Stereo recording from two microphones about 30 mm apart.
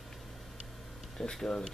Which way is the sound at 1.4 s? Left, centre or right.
Left.